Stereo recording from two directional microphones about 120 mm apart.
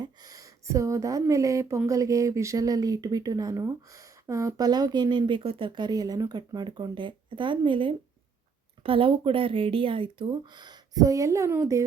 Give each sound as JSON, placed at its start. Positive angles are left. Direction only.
{"t": 0.0, "sound": "speech", "side_deg": -30}